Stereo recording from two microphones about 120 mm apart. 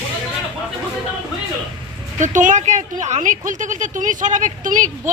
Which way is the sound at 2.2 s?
90° right.